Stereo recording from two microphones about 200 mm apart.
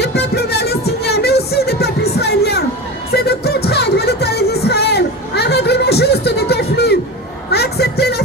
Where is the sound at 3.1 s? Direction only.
55° left (ahead or behind).